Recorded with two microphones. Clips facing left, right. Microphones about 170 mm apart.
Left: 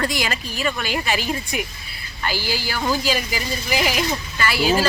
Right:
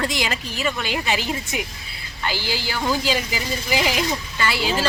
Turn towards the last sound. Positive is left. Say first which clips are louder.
# left 2 dB
turn(degrees=-20)  # may be behind; listen again after turning